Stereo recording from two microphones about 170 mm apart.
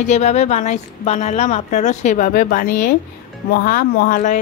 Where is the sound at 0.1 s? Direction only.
40° left (ahead or behind); by 4.2 s 60° left (ahead or behind).